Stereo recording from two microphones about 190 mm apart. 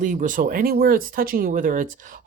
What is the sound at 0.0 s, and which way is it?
Speech, 45° right (ahead or behind).